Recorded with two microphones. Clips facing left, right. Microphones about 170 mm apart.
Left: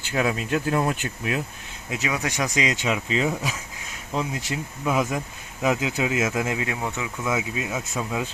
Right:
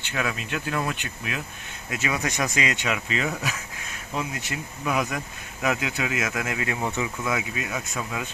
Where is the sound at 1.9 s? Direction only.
10° left (ahead or behind); by 3.3 s 30° left (ahead or behind).